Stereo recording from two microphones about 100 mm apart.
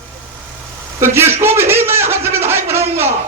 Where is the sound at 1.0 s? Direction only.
25° right (ahead or behind).